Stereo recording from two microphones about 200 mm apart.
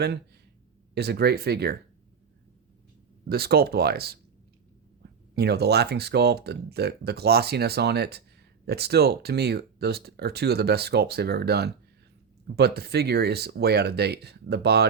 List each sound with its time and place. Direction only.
0.9 s speech: 55° right (ahead or behind)
3.2 s speech: 50° right (ahead or behind)
5.3 s speech: 55° right (ahead or behind)